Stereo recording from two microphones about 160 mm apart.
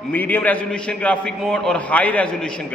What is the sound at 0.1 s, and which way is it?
A man's voice, 10° left (ahead or behind).